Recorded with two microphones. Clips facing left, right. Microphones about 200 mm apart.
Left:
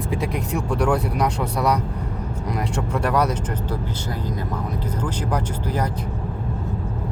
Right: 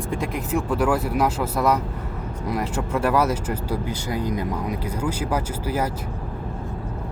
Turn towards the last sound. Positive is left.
turn(degrees=-5)  # may be behind; listen again after turning